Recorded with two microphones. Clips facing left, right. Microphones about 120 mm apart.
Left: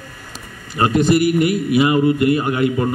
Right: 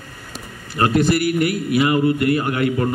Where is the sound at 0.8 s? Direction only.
20° left (ahead or behind).